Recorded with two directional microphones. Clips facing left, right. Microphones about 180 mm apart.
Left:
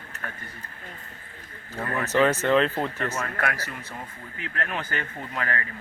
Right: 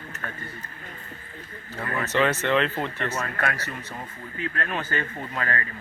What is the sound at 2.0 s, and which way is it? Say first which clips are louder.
Speech: left 2 dB; 10° left (ahead or behind).